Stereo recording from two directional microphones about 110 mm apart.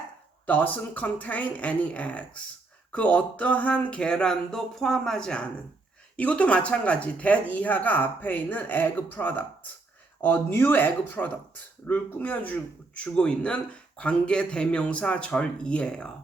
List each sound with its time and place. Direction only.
0.4 s speech: 15° left (ahead or behind)